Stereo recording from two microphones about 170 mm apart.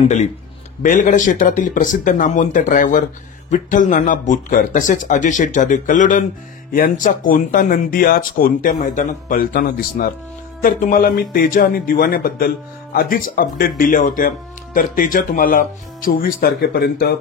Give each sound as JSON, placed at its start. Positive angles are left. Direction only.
{"t": 0.8, "sound": "speech", "side_deg": 50}